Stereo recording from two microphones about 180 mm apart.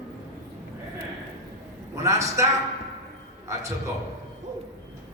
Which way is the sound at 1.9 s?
15° right (ahead or behind).